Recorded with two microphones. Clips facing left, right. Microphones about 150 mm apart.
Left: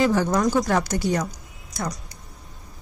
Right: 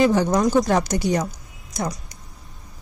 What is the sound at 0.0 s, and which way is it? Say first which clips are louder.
Speech: right 2 dB; 20° right (ahead or behind).